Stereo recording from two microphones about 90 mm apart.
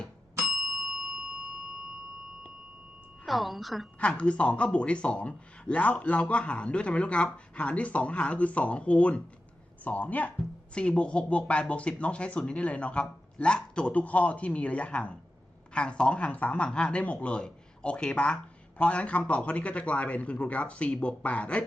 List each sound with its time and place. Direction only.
3.2 s a woman's voice: centre (ahead or behind)
4.0 s a man's voice: 15° left (ahead or behind)